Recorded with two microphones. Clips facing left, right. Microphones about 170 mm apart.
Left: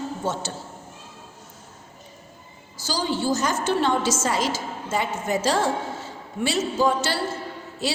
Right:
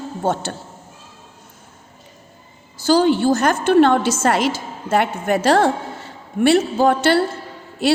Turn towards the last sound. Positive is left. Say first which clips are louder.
# right 10 dB
turn(degrees=-60)  # may be behind; listen again after turning